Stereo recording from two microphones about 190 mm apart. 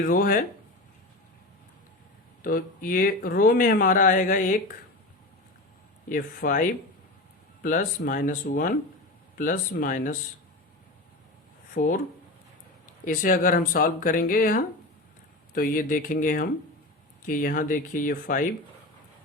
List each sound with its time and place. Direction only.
0.0 s speech: 50° left (ahead or behind)
2.4 s speech: 50° left (ahead or behind)
6.1 s speech: 45° left (ahead or behind)
11.7 s speech: 45° left (ahead or behind)